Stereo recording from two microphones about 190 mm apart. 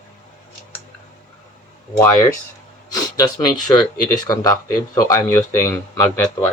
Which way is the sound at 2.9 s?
20° left (ahead or behind).